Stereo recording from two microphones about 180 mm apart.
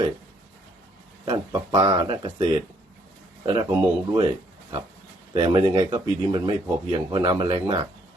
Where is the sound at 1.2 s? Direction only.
20° right (ahead or behind).